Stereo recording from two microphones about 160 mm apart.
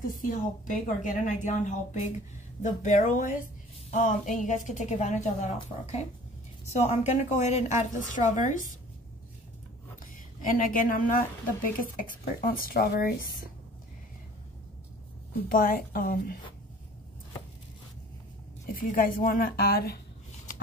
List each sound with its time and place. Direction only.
0.0 s a woman's voice: 60° left (ahead or behind)
10.4 s speech: 60° left (ahead or behind)
15.4 s speech: 65° left (ahead or behind)
18.7 s speech: 60° left (ahead or behind)